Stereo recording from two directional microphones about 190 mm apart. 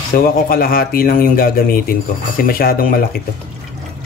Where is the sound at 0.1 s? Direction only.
50° left (ahead or behind).